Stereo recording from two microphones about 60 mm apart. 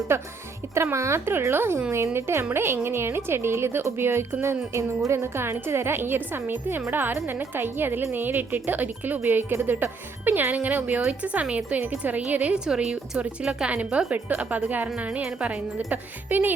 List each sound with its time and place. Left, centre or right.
0.1 s a woman's voice: right
12.5 s a woman's voice: centre
15.2 s a woman's voice: centre
15.9 s speech: right